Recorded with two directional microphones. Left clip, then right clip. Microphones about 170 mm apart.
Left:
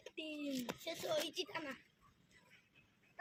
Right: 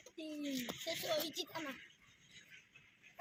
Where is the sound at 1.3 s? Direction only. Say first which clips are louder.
Even; 10° left (ahead or behind).